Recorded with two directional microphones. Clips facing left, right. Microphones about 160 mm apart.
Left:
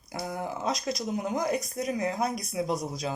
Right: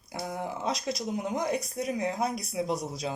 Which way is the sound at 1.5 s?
30° right (ahead or behind).